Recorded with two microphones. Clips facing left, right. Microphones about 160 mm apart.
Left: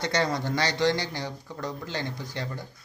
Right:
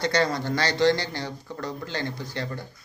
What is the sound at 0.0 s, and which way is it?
Speech, 20° left (ahead or behind).